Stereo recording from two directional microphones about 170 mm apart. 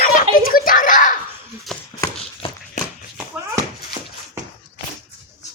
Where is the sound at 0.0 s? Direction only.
55° left (ahead or behind).